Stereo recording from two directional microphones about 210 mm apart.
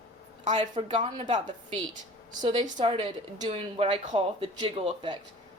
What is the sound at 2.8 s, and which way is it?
Speech, 25° right (ahead or behind).